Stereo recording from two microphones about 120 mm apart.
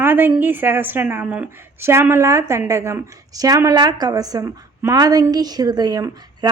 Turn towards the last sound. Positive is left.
turn(degrees=-35)  # may be behind; listen again after turning